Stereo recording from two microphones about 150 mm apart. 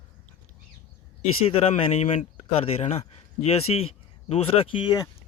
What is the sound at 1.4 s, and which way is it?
Speech, 45° left (ahead or behind).